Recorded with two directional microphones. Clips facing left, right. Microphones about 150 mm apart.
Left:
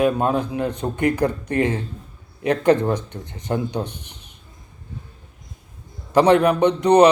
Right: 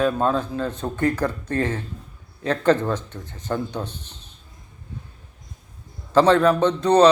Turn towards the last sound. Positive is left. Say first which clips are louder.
# left 2 dB
turn(degrees=15)  # may be behind; listen again after turning